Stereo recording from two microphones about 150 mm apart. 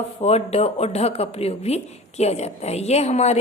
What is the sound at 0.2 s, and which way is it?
Speech, 45° left (ahead or behind).